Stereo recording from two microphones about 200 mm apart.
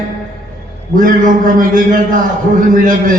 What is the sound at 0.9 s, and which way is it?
A man's voice, 40° right (ahead or behind).